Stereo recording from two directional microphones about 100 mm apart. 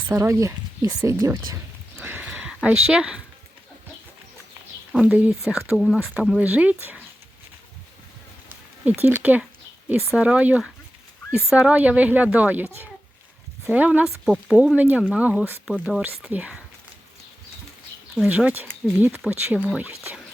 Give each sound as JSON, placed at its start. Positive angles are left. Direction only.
{"t": 0.1, "sound": "speech", "side_deg": -30}
{"t": 2.0, "sound": "a sound", "side_deg": -20}
{"t": 4.9, "sound": "a woman's voice", "side_deg": -10}
{"t": 6.4, "sound": "speech", "side_deg": -15}
{"t": 8.4, "sound": "speech", "side_deg": -15}
{"t": 13.7, "sound": "speech", "side_deg": -15}
{"t": 14.0, "sound": "a woman's voice", "side_deg": -5}
{"t": 14.6, "sound": "speech", "side_deg": -15}
{"t": 18.1, "sound": "speech", "side_deg": -10}